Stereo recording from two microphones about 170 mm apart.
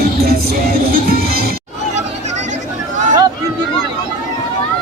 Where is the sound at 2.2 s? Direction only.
45° right (ahead or behind).